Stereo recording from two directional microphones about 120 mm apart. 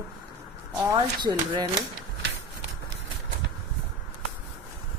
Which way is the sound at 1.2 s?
40° right (ahead or behind).